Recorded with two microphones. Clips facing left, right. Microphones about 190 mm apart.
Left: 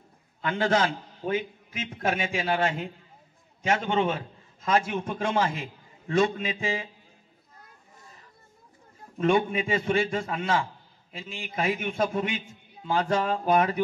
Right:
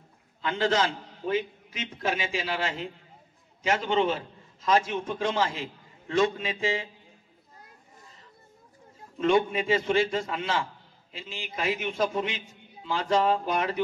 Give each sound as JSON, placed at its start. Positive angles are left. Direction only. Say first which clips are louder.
{"t": 0.4, "sound": "a man's voice", "louder": "left 1 dB", "side_deg": 55}
{"t": 9.2, "sound": "a man's voice", "louder": "even", "side_deg": 55}